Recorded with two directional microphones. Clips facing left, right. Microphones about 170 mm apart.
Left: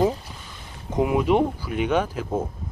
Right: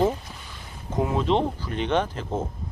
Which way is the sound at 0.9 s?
15° left (ahead or behind).